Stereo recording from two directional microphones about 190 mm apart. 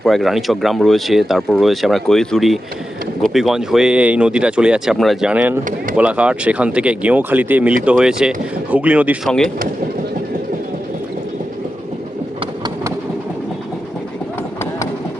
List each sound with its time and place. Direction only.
0.0 s speech: centre (ahead or behind)